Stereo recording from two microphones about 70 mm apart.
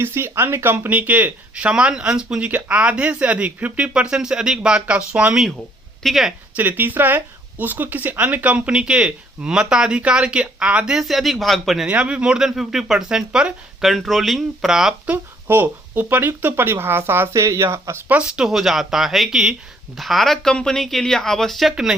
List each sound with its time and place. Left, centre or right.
0.0 s speech: right; by 2.5 s centre
2.5 s speech: right
6.0 s a woman's voice: centre
6.6 s speech: right; by 11.9 s centre
11.9 s speech: centre
15.4 s speech: right
18.1 s speech: centre